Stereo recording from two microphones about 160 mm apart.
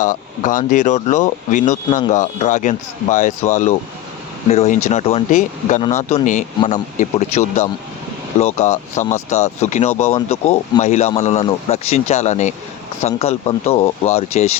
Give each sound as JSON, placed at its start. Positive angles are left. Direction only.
{"t": 0.0, "sound": "speech", "side_deg": 55}